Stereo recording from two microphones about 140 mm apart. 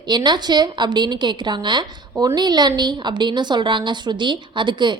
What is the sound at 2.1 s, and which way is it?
Speech, 20° right (ahead or behind).